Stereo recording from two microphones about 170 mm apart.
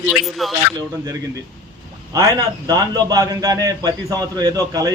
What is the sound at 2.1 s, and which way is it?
A man's voice, 20° right (ahead or behind).